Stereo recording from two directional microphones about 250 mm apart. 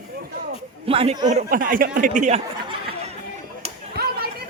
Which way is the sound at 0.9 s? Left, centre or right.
Right.